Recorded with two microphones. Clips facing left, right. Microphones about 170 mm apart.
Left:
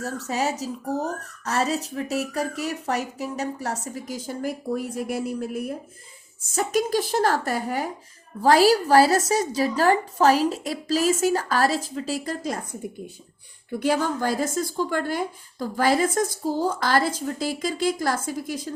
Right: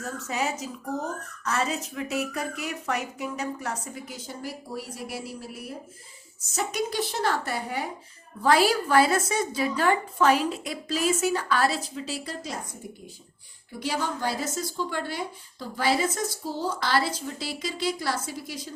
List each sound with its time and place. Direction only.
0.0 s speech: 35° left (ahead or behind)
13.7 s speech: 50° left (ahead or behind)